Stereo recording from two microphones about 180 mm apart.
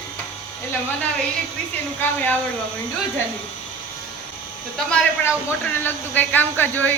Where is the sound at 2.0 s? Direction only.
10° left (ahead or behind).